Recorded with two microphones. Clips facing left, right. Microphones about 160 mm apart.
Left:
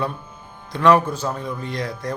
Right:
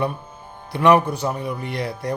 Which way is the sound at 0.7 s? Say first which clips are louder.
Even; 15° right (ahead or behind).